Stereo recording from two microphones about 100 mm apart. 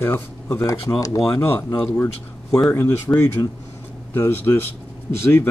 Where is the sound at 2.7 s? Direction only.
20° left (ahead or behind).